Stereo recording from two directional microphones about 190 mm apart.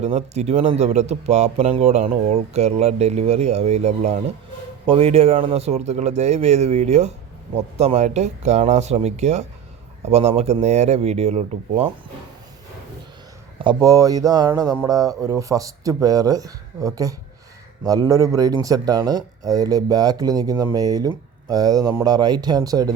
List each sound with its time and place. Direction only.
0.0 s speech: 35° right (ahead or behind)
13.6 s speech: 20° right (ahead or behind)